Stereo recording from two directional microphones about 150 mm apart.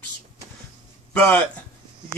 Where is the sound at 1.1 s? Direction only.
5° left (ahead or behind).